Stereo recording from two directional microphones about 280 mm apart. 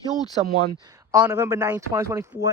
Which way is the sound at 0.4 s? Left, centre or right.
Centre.